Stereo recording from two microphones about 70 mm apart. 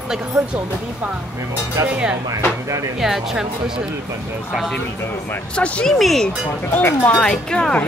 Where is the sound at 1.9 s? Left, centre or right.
Centre.